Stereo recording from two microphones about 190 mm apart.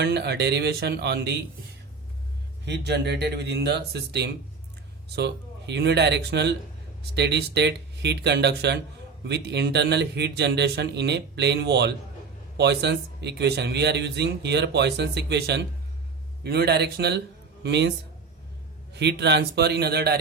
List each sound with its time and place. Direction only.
0.0 s speech: 60° right (ahead or behind)
2.6 s speech: 60° right (ahead or behind)
18.9 s speech: 65° right (ahead or behind)